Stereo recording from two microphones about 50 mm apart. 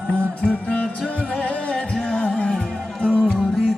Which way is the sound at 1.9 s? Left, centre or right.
Centre.